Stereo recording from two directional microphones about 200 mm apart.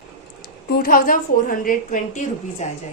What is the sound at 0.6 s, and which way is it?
A woman's voice, 50° left (ahead or behind).